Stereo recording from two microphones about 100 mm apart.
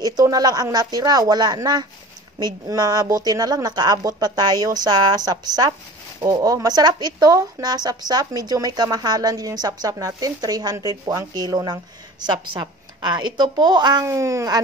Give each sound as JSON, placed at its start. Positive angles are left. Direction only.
{"t": 0.2, "sound": "speech", "side_deg": -40}
{"t": 14.0, "sound": "speech", "side_deg": -30}